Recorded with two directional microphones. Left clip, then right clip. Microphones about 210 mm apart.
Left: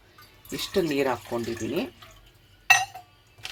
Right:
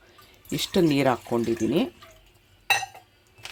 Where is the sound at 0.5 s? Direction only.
55° right (ahead or behind).